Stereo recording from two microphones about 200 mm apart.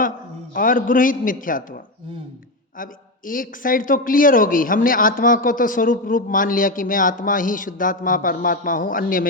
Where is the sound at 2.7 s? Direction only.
45° left (ahead or behind).